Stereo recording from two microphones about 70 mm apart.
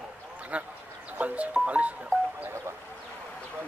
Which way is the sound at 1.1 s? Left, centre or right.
Right.